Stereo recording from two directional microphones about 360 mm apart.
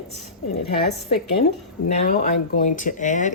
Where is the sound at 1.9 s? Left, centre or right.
Left.